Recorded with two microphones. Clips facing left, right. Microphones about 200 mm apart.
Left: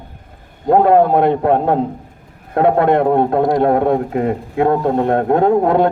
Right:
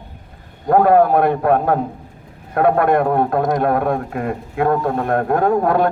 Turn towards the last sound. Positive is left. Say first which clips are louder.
# left 3 dB
turn(degrees=20)  # may be behind; listen again after turning